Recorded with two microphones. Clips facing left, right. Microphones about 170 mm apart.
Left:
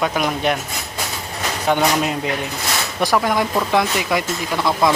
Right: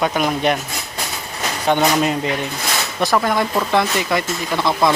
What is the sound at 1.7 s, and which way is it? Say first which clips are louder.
Speech: right 2 dB; 5° left (ahead or behind).